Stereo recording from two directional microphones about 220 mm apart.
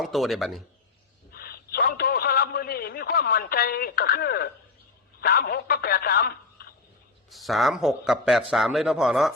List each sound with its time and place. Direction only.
0.0 s a man's voice: centre (ahead or behind)
1.3 s a sound: 45° left (ahead or behind)
5.2 s speech: 45° left (ahead or behind)
7.3 s speech: centre (ahead or behind)